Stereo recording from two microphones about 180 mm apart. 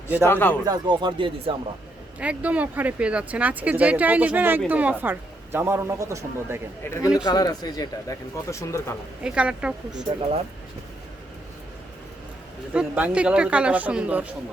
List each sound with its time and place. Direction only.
0.3 s a man's voice: 10° left (ahead or behind)
0.6 s speech: 25° right (ahead or behind)
2.1 s speech: 10° right (ahead or behind)
6.8 s a man's voice: 15° left (ahead or behind)
9.2 s speech: 5° right (ahead or behind)
12.7 s speech: 5° right (ahead or behind)